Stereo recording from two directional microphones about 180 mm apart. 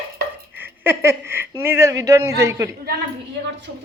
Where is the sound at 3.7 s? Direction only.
75° right (ahead or behind).